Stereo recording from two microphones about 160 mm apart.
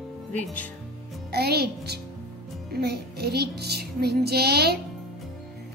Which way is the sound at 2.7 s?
90° right.